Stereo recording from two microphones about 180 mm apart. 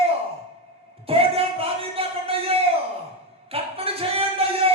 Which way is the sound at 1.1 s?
30° right (ahead or behind).